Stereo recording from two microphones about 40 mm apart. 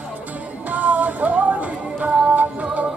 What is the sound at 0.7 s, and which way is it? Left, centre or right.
Music, right.